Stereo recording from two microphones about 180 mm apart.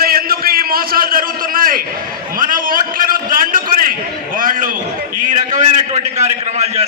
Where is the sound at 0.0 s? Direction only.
55° right (ahead or behind).